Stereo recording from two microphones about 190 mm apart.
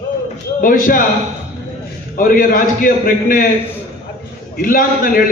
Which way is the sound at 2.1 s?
45° left (ahead or behind).